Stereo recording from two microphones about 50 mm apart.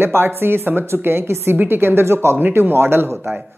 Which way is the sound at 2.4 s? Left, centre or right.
Right.